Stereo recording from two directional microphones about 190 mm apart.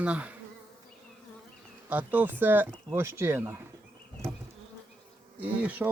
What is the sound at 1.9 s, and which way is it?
Speech, 10° right (ahead or behind).